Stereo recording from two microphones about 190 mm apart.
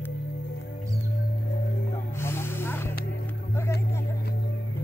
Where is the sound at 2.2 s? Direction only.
10° left (ahead or behind).